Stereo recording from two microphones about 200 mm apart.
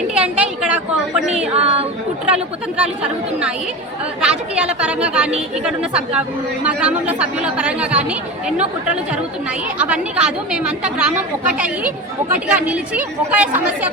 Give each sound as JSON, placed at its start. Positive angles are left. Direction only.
{"t": 0.1, "sound": "a woman's voice", "side_deg": -5}
{"t": 1.5, "sound": "speech", "side_deg": -30}
{"t": 2.2, "sound": "a woman's voice", "side_deg": -5}
{"t": 4.2, "sound": "a woman's voice", "side_deg": -5}
{"t": 9.7, "sound": "a woman's voice", "side_deg": -5}